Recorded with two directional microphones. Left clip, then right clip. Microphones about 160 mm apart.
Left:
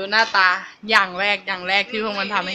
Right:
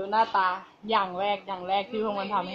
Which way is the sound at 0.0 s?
35° left (ahead or behind).